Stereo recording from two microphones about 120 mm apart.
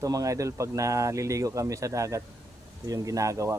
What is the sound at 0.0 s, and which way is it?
Speech, 30° right (ahead or behind).